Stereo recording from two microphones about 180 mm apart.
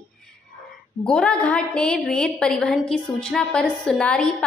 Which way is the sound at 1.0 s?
5° left (ahead or behind).